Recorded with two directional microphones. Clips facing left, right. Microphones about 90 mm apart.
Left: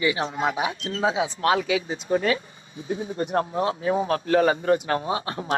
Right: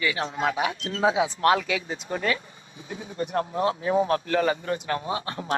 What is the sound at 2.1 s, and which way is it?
Speech, 25° left (ahead or behind).